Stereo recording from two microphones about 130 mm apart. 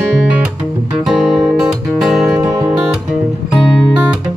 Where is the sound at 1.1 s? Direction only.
Centre (ahead or behind).